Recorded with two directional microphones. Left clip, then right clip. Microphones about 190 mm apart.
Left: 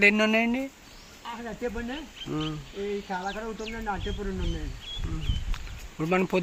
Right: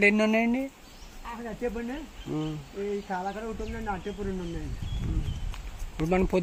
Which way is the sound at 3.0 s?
20° right (ahead or behind).